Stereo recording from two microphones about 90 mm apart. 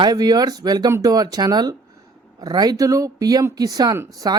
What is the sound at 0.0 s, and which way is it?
Speech, 50° right (ahead or behind).